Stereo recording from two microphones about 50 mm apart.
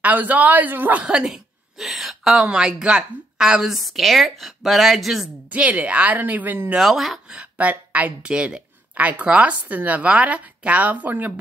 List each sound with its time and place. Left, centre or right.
0.0 s speech: right
1.0 s a woman's voice: centre
1.8 s a sound: centre
2.4 s a woman's voice: centre
3.7 s a woman's voice: centre
5.5 s a woman's voice: right
6.8 s a woman's voice: centre
7.6 s a woman's voice: right